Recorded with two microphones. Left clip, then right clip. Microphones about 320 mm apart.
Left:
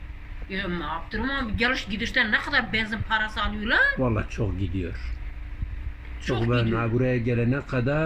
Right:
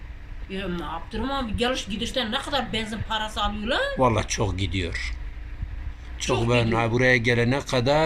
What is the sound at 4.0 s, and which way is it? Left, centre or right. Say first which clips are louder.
Speech: right 6 dB; right.